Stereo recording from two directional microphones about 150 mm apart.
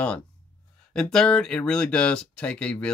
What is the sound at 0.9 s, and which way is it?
Speech, 5° left (ahead or behind).